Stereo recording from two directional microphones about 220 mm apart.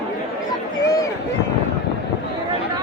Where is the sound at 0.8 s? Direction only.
15° left (ahead or behind).